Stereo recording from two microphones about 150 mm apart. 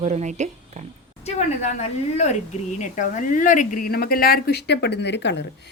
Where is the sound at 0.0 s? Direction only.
50° right (ahead or behind).